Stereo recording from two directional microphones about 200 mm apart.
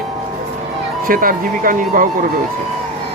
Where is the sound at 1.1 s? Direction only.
45° right (ahead or behind).